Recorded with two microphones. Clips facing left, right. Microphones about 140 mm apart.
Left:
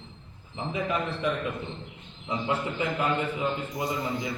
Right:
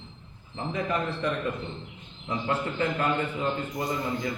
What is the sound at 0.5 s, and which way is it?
A man's voice, 10° left (ahead or behind).